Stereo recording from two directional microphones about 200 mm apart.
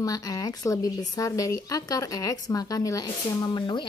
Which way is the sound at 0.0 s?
20° left (ahead or behind).